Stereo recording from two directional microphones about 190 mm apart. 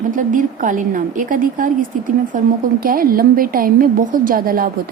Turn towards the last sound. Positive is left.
turn(degrees=-50)  # may be behind; listen again after turning